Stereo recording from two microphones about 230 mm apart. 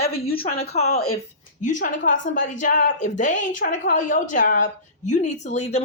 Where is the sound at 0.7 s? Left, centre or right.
Left.